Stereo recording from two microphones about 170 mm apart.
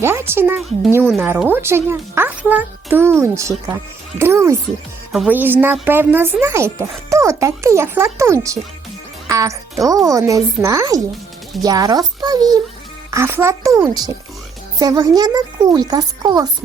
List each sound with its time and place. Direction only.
0.0 s speech: 15° right (ahead or behind)